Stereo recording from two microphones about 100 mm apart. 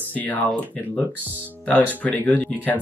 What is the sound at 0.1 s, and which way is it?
Speech, 15° left (ahead or behind).